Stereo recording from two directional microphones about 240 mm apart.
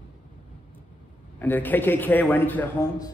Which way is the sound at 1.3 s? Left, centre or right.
Centre.